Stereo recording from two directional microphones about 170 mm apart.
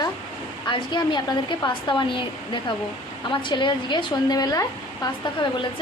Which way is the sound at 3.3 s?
30° left (ahead or behind).